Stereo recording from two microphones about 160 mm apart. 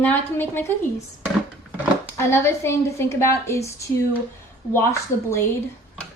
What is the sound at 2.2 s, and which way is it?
A woman's voice, 15° left (ahead or behind).